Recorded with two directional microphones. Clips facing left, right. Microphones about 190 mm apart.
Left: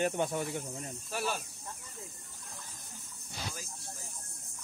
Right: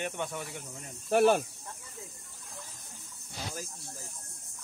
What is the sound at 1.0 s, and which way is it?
Speech, 60° right (ahead or behind).